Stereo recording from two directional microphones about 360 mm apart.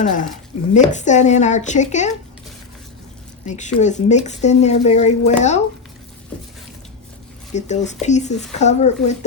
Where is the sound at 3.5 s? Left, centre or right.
Centre.